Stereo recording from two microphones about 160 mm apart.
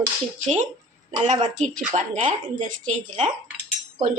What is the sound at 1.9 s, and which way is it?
Speech, 40° right (ahead or behind).